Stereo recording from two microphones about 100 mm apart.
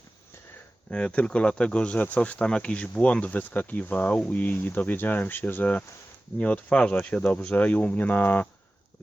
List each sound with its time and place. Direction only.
0.9 s speech: 10° left (ahead or behind)